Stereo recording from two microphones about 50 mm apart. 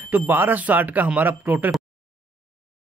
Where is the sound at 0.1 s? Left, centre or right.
Right.